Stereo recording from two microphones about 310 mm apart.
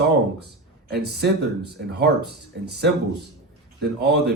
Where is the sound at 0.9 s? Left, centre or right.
Right.